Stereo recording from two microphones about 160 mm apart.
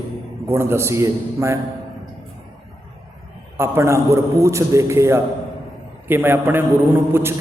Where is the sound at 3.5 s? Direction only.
15° right (ahead or behind).